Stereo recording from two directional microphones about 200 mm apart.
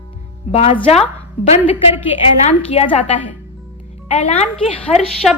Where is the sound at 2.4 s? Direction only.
30° left (ahead or behind).